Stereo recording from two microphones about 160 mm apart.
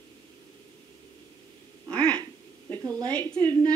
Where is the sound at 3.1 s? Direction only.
10° left (ahead or behind).